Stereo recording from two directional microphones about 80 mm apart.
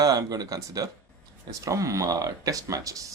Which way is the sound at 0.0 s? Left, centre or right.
Right.